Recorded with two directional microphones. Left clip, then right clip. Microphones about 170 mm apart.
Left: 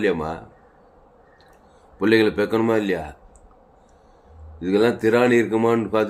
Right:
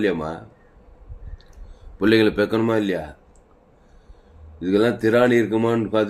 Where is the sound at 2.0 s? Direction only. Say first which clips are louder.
Right 1 dB; 15° right (ahead or behind).